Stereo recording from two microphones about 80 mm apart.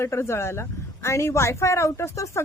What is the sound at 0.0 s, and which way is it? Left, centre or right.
Speech, left.